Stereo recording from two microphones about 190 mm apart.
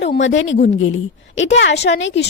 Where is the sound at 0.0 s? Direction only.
70° left (ahead or behind).